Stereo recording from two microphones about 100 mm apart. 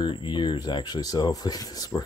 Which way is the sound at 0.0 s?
50° left (ahead or behind).